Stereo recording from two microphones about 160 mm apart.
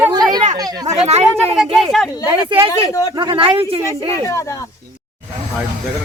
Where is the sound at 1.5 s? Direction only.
5° right (ahead or behind).